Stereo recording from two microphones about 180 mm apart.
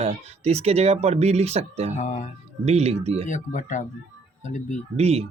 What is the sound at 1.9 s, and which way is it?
Speech, 40° left (ahead or behind).